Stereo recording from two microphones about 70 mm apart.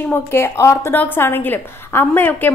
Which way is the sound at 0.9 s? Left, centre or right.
Left.